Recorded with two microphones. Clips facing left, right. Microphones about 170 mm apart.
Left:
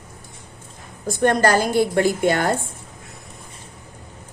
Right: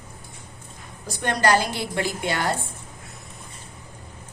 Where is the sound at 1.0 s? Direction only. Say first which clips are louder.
Left 6 dB; 50° left (ahead or behind).